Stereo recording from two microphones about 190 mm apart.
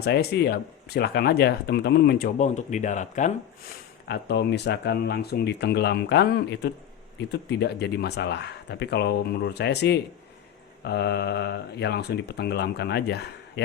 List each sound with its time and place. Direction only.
0.0 s speech: 60° left (ahead or behind); by 3.3 s 40° left (ahead or behind)
4.0 s speech: 60° left (ahead or behind)